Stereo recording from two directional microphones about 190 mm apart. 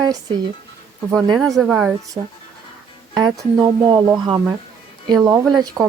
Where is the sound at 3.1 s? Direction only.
20° right (ahead or behind).